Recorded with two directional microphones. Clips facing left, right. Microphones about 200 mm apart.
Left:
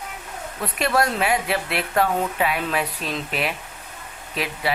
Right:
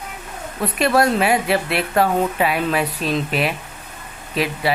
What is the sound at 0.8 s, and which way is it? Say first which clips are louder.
Speech: right 5 dB; 35° right (ahead or behind).